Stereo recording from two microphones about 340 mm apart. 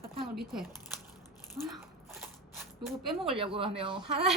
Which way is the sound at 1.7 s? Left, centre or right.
Centre.